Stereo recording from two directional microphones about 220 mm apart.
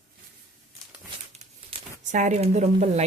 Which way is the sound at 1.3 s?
30° right (ahead or behind).